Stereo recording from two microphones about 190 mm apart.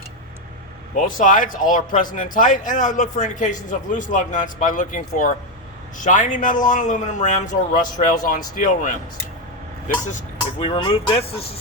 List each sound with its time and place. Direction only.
0.9 s speech: 45° left (ahead or behind)
10.7 s speech: 25° left (ahead or behind)